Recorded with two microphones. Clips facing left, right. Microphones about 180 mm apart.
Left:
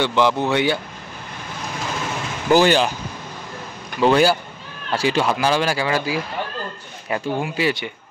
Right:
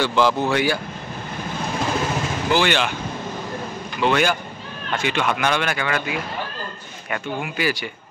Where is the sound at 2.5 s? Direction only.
40° left (ahead or behind).